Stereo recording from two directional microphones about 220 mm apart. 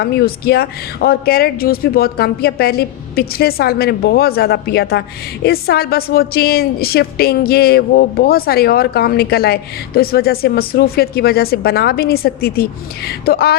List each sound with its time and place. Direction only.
0.0 s speech: 45° left (ahead or behind)